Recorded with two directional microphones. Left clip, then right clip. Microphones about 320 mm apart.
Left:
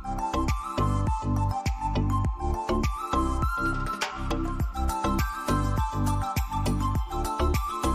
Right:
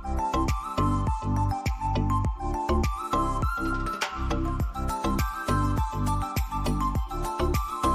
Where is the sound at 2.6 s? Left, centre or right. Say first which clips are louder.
Right 1 dB; centre.